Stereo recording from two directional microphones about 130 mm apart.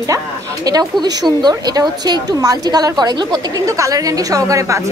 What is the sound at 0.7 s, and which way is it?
A woman's voice, 30° right (ahead or behind).